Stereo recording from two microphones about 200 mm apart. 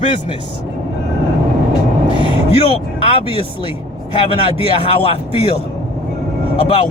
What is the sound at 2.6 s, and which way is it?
Speech, 30° left (ahead or behind).